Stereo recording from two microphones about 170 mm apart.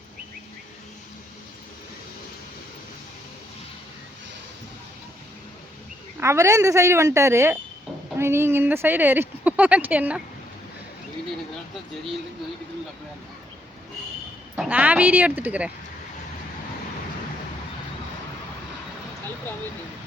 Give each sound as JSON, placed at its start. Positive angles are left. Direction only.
{"t": 6.1, "sound": "speech", "side_deg": -15}
{"t": 14.5, "sound": "speech", "side_deg": -10}